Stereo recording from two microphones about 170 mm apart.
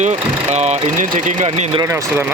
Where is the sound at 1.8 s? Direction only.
15° right (ahead or behind).